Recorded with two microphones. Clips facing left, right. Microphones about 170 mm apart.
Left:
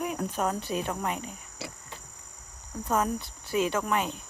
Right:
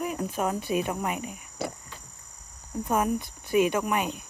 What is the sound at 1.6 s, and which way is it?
Insect, 50° right (ahead or behind).